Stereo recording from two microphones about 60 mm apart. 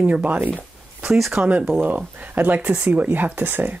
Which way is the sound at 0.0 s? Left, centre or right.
Right.